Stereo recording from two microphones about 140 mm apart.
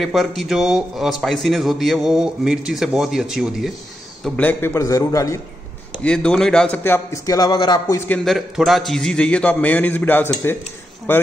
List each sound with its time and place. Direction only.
0.0 s a man's voice: centre (ahead or behind)
4.4 s a man's voice: 15° left (ahead or behind)
6.0 s a man's voice: 5° left (ahead or behind)
6.8 s a man's voice: 20° left (ahead or behind)
8.1 s a man's voice: centre (ahead or behind)